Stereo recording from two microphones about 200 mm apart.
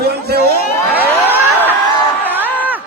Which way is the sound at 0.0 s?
50° right (ahead or behind).